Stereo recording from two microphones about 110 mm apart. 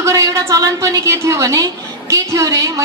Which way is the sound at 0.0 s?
30° right (ahead or behind).